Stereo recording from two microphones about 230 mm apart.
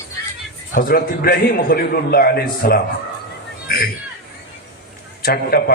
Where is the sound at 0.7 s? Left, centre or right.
Left.